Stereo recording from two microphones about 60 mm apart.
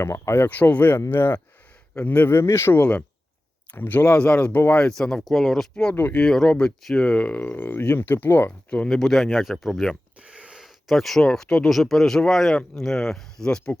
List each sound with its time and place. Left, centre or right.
0.0 s speech: left
0.4 s speech: left
2.3 s speech: left
3.7 s speech: left; by 5.6 s centre
5.9 s speech: left
6.1 s speech: centre
7.3 s speech: left
8.9 s speech: centre
10.2 s a sound: centre
10.8 s speech: centre
11.3 s speech: centre